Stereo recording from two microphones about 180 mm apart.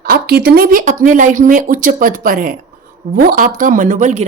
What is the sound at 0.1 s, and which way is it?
A woman's voice, 60° right (ahead or behind).